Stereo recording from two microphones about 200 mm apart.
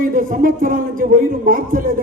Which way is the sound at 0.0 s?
45° right (ahead or behind).